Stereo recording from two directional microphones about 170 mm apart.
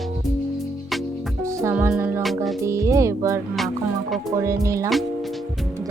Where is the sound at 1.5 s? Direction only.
15° right (ahead or behind).